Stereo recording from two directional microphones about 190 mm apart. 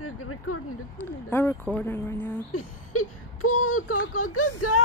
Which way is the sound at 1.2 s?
10° left (ahead or behind).